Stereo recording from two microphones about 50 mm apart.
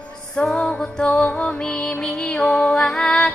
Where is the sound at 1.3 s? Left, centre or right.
Left.